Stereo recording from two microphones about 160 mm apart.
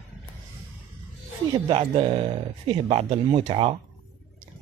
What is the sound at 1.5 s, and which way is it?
Speech, 35° right (ahead or behind).